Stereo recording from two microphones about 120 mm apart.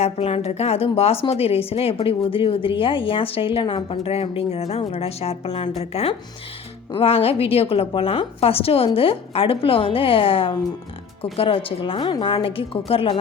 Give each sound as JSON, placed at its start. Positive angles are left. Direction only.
{"t": 0.0, "sound": "a woman's voice", "side_deg": 55}